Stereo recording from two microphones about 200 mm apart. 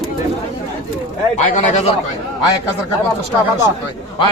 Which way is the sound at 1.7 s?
30° left (ahead or behind).